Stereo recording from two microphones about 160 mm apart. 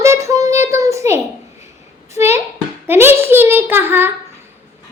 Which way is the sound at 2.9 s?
15° right (ahead or behind).